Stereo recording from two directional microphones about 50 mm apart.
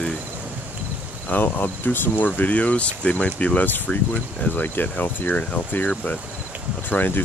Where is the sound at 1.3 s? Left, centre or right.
Left.